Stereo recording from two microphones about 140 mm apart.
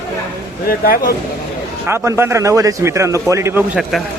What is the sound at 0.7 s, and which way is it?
Speech, 90° left.